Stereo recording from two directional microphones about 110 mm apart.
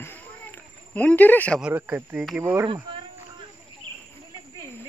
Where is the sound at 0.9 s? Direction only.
15° left (ahead or behind).